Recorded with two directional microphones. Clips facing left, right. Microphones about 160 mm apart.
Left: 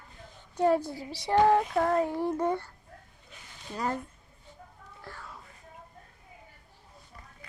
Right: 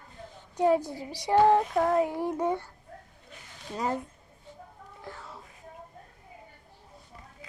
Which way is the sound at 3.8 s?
20° right (ahead or behind).